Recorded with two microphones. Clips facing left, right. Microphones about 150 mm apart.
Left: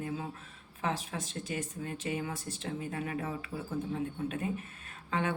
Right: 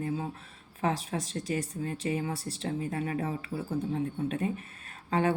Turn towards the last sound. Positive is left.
turn(degrees=-35)  # may be behind; listen again after turning